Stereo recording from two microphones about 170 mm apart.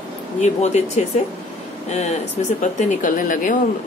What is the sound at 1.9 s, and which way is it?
Mantra, 40° left (ahead or behind).